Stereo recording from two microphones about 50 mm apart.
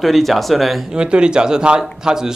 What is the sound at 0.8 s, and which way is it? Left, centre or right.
Speech, centre.